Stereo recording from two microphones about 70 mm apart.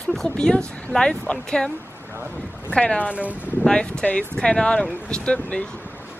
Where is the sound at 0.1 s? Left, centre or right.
Centre.